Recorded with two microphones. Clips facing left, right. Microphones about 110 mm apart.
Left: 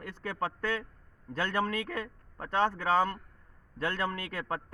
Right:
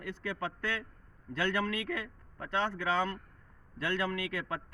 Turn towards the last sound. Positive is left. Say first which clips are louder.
# even
turn(degrees=45)  # may be behind; listen again after turning